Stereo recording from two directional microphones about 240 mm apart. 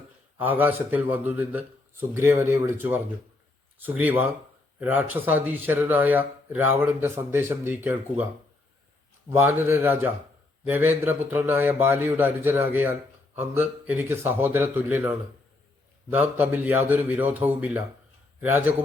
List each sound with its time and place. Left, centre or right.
0.3 s a man's voice: centre
9.3 s a man's voice: centre